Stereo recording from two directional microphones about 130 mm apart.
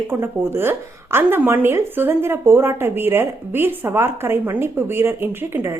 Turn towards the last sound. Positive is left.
turn(degrees=-20)  # may be behind; listen again after turning